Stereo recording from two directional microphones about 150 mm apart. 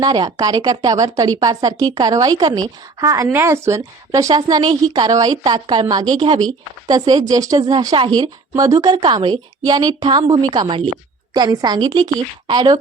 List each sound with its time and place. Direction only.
0.0 s a woman's voice: 25° right (ahead or behind)